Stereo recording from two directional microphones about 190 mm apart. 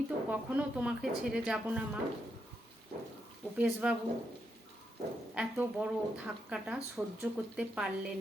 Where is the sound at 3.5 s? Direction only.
5° right (ahead or behind).